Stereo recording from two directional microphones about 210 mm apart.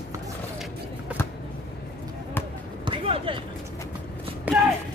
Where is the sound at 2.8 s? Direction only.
25° right (ahead or behind).